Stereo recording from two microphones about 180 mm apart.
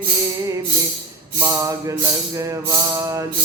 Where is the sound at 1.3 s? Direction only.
15° right (ahead or behind).